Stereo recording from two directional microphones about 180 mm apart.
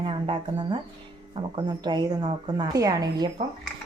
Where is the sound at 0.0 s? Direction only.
30° right (ahead or behind).